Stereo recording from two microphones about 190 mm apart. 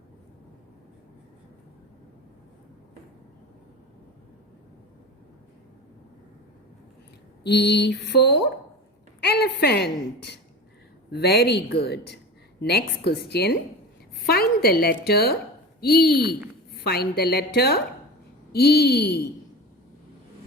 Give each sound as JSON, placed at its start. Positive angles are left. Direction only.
{"t": 7.4, "sound": "a woman's voice", "side_deg": 60}